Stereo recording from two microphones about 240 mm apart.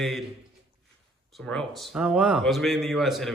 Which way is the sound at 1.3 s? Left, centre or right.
Centre.